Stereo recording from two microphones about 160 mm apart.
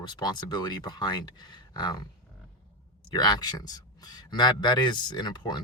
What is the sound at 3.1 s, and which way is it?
Speech, 25° left (ahead or behind).